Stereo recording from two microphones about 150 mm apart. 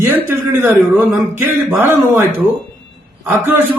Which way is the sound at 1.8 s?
15° right (ahead or behind).